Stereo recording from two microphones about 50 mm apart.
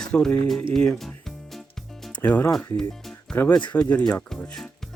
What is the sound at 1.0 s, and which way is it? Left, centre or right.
Music, centre.